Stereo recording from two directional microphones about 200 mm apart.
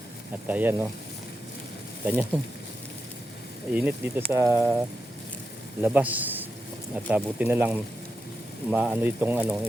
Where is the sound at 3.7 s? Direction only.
5° right (ahead or behind).